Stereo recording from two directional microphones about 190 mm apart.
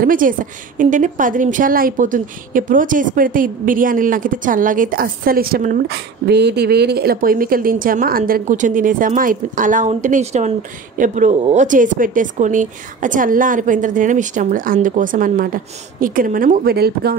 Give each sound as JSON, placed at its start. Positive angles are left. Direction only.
{"t": 0.0, "sound": "a woman's voice", "side_deg": -45}